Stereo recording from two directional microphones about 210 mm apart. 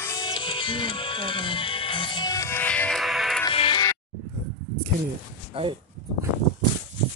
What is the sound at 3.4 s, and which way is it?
Music, 25° left (ahead or behind).